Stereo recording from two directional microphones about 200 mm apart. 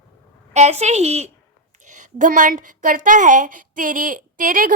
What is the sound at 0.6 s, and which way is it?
A woman's voice, 35° right (ahead or behind).